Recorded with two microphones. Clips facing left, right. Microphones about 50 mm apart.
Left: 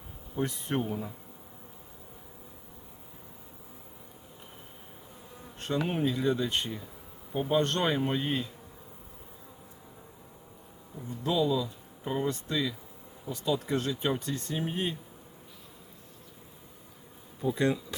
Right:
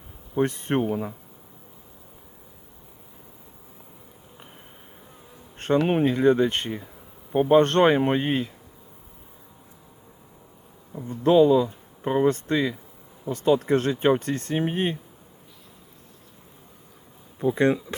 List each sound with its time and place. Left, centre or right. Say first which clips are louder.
0.3 s speech: right 8 dB; right
0.9 s speech: right 8 dB; right
5.5 s insect: right 10 dB; right
5.9 s speech: right 8 dB; right
11.1 s speech: right 11 dB; right
17.4 s speech: right 7 dB; right